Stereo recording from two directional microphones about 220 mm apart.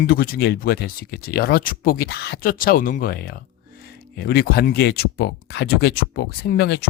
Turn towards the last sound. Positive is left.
turn(degrees=45)  # may be behind; listen again after turning